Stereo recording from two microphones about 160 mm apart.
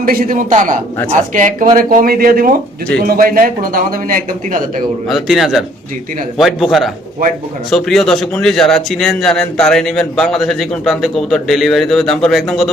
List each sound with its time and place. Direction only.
0.0 s speech: 60° right (ahead or behind)
5.0 s a man's voice: centre (ahead or behind)